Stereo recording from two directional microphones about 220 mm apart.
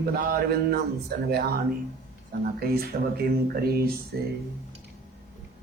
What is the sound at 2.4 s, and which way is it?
A man's voice, 45° right (ahead or behind).